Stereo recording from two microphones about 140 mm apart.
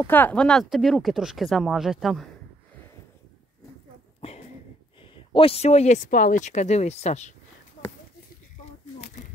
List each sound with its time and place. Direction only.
0.0 s speech: 15° left (ahead or behind)
4.2 s a sound: 45° left (ahead or behind)
5.1 s speech: 40° left (ahead or behind)